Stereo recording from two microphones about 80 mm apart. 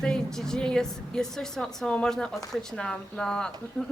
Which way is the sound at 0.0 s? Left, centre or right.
Centre.